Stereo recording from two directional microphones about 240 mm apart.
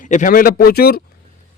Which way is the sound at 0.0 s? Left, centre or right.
Left.